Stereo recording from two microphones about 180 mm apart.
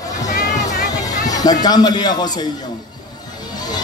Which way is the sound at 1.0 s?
20° left (ahead or behind).